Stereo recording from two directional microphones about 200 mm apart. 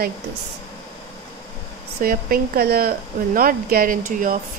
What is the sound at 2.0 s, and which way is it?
Speech, 45° right (ahead or behind).